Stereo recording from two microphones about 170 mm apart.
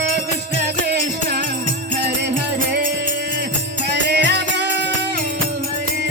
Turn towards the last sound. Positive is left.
turn(degrees=-85)